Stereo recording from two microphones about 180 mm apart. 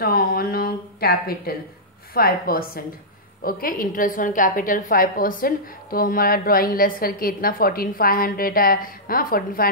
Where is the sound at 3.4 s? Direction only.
50° left (ahead or behind).